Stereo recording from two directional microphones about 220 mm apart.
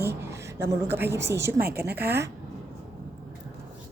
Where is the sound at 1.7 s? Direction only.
45° right (ahead or behind).